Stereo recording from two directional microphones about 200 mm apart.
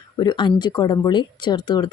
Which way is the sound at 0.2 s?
20° left (ahead or behind).